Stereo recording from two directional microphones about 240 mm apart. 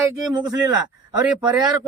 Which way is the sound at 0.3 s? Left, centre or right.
Centre.